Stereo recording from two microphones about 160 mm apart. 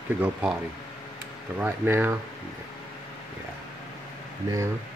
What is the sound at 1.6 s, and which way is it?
Speech, 10° right (ahead or behind).